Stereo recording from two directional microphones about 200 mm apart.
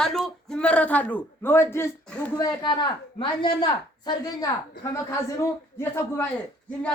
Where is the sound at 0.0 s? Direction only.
Centre (ahead or behind).